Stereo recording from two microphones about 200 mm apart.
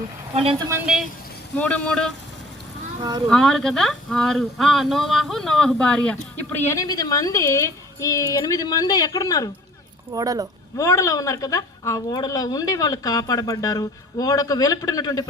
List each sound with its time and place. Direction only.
0.3 s speech: 30° right (ahead or behind)
1.5 s speech: 5° left (ahead or behind)
3.2 s a woman's voice: centre (ahead or behind); by 9.5 s 15° left (ahead or behind)
10.1 s speech: 20° right (ahead or behind)
10.8 s a woman's voice: 15° left (ahead or behind)